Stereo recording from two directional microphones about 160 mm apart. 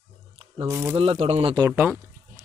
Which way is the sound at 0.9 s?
40° right (ahead or behind).